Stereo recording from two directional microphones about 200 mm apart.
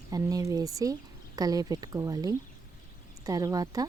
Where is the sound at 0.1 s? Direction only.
20° right (ahead or behind).